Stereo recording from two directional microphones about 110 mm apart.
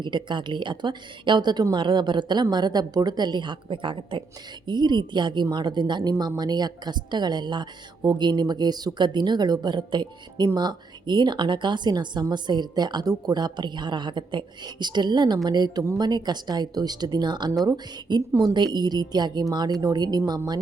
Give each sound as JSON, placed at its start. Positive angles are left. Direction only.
{"t": 0.0, "sound": "a woman's voice", "side_deg": -45}